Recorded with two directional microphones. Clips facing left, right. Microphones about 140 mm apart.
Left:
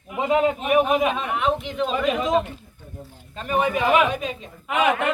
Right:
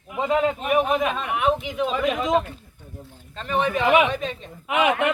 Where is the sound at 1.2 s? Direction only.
5° right (ahead or behind).